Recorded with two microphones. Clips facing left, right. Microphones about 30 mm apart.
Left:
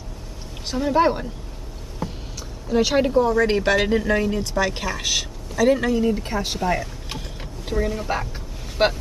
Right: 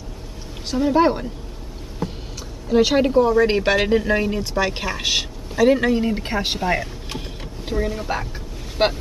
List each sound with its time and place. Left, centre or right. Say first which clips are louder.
0.7 s speech: right 2 dB; centre
2.0 s rowboat: right 2 dB; centre
2.7 s speech: right 2 dB; centre
5.9 s speech: even; right
7.2 s speech: right 2 dB; centre